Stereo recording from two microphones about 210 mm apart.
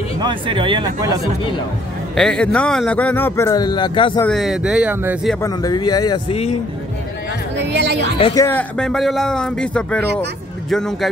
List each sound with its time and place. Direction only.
0.2 s speech: 25° right (ahead or behind)
2.1 s a man's voice: 5° left (ahead or behind); by 4.2 s 25° left (ahead or behind)
4.2 s speech: centre (ahead or behind)
5.4 s speech: 15° left (ahead or behind)
7.5 s a woman's voice: 55° right (ahead or behind)
8.4 s speech: 10° left (ahead or behind)